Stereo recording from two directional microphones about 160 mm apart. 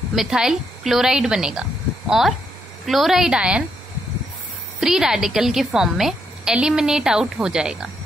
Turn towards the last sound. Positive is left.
turn(degrees=-5)  # may be behind; listen again after turning